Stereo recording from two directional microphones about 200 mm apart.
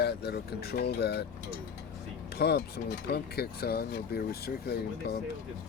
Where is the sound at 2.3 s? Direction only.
55° left (ahead or behind).